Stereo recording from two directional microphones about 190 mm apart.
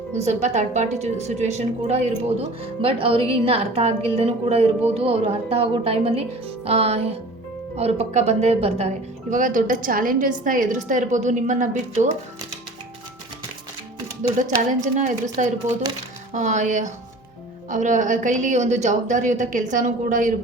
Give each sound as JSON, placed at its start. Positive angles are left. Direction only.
{"t": 0.2, "sound": "a woman's voice", "side_deg": -35}
{"t": 14.2, "sound": "a woman's voice", "side_deg": -40}